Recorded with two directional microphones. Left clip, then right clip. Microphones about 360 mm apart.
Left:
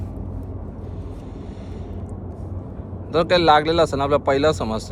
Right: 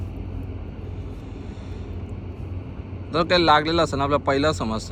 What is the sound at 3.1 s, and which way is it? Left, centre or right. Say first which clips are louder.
Speech: left 2 dB; centre.